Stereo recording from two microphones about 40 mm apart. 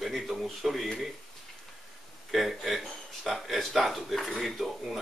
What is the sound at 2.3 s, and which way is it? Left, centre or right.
Speech, centre.